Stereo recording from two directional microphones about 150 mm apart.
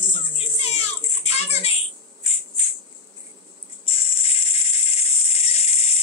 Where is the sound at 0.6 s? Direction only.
45° left (ahead or behind).